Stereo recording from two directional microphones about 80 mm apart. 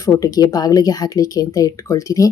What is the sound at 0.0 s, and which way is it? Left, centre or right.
Speech, left.